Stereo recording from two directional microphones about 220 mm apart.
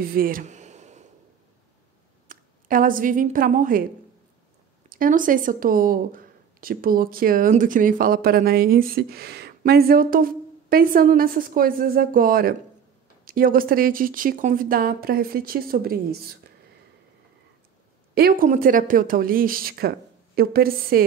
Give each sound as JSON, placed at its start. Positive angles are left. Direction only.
{"t": 0.0, "sound": "a sound", "side_deg": -40}
{"t": 2.2, "sound": "a woman's voice", "side_deg": -40}
{"t": 4.8, "sound": "speech", "side_deg": -40}
{"t": 18.1, "sound": "a woman's voice", "side_deg": -40}